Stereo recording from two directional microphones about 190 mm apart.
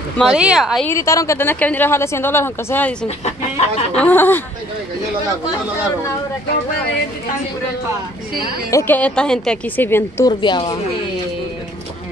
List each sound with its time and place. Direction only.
0.2 s speech: 5° right (ahead or behind)
0.8 s speech: 15° left (ahead or behind)
8.6 s speech: 15° left (ahead or behind)
10.4 s a woman's voice: 25° left (ahead or behind)